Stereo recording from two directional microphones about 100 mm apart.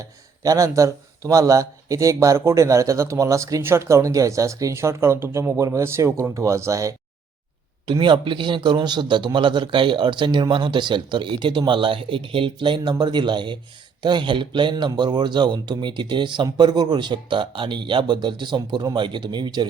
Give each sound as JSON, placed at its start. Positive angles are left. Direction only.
{"t": 0.0, "sound": "speech", "side_deg": -35}
{"t": 7.9, "sound": "a man's voice", "side_deg": -50}